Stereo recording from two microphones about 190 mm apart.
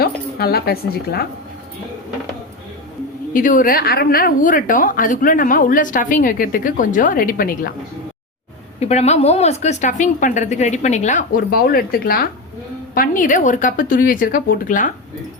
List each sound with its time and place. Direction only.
0.0 s speech: 55° left (ahead or behind)
3.3 s a woman's voice: 45° left (ahead or behind)
8.8 s a woman's voice: 35° left (ahead or behind)